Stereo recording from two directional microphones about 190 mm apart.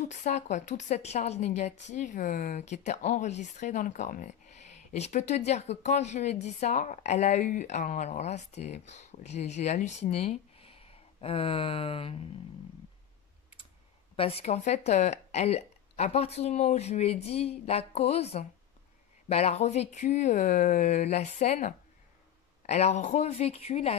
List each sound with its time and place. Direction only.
0.0 s a woman's voice: 40° left (ahead or behind)
14.1 s a woman's voice: 30° left (ahead or behind)